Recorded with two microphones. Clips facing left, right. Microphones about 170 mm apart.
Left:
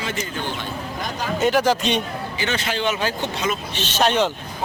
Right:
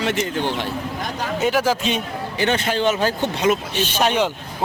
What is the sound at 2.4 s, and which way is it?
Speech, 50° right (ahead or behind).